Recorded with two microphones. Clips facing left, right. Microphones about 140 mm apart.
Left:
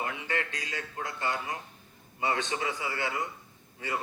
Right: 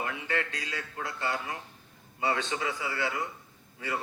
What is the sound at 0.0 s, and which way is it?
Music, 25° left (ahead or behind).